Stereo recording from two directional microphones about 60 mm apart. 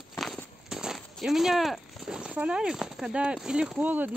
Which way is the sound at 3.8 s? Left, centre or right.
Right.